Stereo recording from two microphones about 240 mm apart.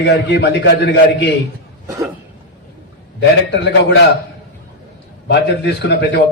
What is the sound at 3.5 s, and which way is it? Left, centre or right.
Speech, left.